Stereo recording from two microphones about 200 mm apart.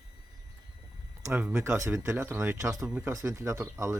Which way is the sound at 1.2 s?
10° right (ahead or behind).